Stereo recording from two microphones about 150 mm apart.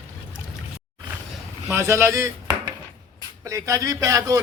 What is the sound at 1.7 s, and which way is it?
A man's voice, 20° right (ahead or behind).